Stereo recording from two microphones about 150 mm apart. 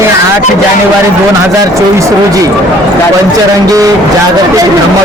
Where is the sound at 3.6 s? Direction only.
25° right (ahead or behind).